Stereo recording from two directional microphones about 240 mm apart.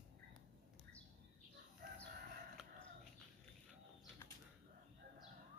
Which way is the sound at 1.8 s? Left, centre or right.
Right.